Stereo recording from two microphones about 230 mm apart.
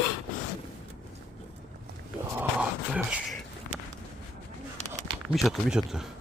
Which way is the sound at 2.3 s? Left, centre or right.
Centre.